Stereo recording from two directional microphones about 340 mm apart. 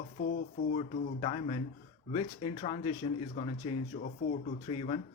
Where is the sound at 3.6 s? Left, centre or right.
Centre.